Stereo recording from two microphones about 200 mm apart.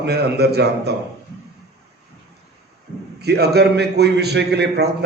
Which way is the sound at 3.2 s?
55° right (ahead or behind).